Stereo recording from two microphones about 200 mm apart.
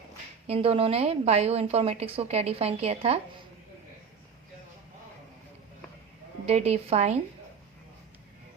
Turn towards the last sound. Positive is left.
turn(degrees=-30)  # may be behind; listen again after turning